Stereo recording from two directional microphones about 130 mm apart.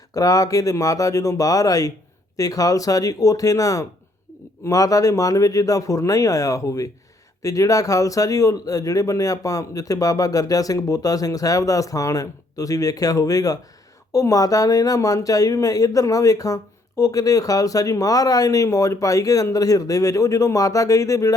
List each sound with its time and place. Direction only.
0.1 s speech: 25° left (ahead or behind)